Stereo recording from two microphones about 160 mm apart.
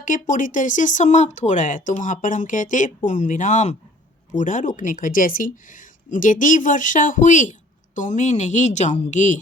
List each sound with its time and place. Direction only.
0.0 s a woman's voice: 55° left (ahead or behind)